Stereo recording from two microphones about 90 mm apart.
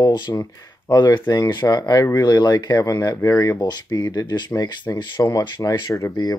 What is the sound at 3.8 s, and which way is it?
Speech, 50° left (ahead or behind).